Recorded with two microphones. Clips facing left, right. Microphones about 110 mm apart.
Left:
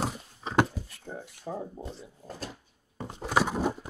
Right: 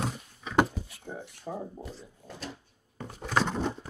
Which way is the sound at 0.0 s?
35° left (ahead or behind).